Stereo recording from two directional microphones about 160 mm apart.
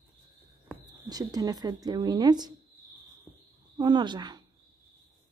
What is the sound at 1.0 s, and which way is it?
A woman's voice, 25° right (ahead or behind).